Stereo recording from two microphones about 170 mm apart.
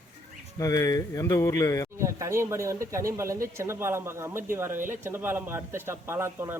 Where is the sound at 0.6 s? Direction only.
20° left (ahead or behind).